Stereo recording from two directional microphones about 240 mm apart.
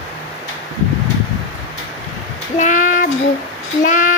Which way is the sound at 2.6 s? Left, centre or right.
Left.